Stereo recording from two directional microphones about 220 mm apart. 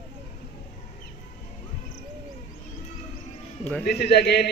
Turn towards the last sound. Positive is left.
turn(degrees=50)  # may be behind; listen again after turning